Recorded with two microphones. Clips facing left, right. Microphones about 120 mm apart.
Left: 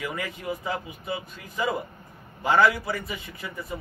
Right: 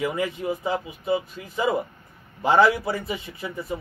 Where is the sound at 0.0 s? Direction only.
25° right (ahead or behind).